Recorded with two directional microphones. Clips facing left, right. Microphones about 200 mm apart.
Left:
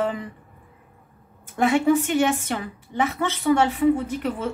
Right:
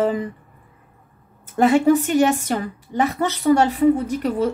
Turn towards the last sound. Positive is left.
turn(degrees=-40)  # may be behind; listen again after turning